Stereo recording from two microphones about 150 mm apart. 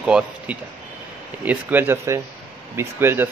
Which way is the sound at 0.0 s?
5° right (ahead or behind).